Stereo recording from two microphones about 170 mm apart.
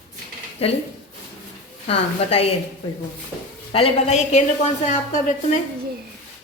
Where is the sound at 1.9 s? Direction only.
35° left (ahead or behind).